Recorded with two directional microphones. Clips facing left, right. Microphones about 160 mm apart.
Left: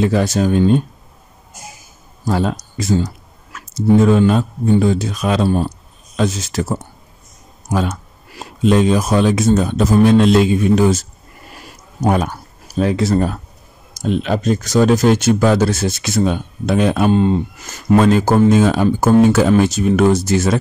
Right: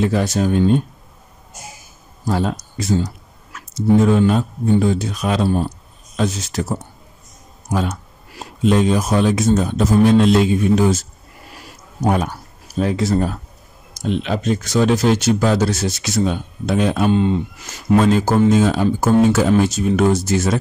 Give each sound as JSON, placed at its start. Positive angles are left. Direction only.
{"t": 0.0, "sound": "speech", "side_deg": 90}
{"t": 2.2, "sound": "speech", "side_deg": 90}
{"t": 7.7, "sound": "speech", "side_deg": 90}
{"t": 12.0, "sound": "speech", "side_deg": 90}
{"t": 12.8, "sound": "speech", "side_deg": 75}
{"t": 13.9, "sound": "speech", "side_deg": 45}
{"t": 17.9, "sound": "speech", "side_deg": 65}